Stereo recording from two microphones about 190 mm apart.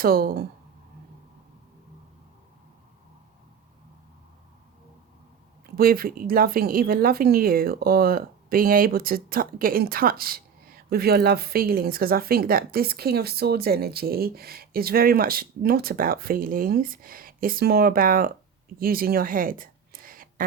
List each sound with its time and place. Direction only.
0.0 s speech: 50° right (ahead or behind)
5.7 s a woman's voice: 50° right (ahead or behind)